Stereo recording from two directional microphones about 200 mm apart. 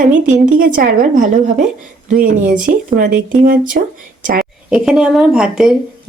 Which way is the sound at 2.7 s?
45° right (ahead or behind).